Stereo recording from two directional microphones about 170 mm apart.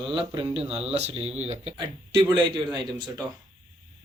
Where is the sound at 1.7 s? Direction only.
25° right (ahead or behind).